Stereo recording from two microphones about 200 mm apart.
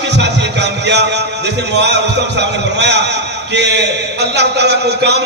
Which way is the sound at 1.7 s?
60° right (ahead or behind).